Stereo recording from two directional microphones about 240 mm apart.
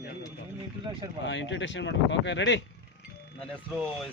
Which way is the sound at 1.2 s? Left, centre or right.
Left.